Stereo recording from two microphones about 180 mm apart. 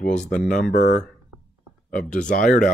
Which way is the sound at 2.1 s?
45° left (ahead or behind).